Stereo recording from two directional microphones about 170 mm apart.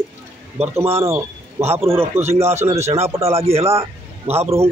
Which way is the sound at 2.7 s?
40° right (ahead or behind).